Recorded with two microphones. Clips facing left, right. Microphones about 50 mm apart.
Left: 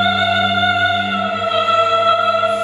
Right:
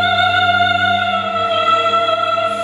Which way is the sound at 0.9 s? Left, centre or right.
Right.